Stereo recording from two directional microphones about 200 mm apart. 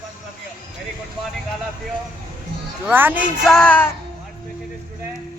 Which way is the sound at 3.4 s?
5° left (ahead or behind).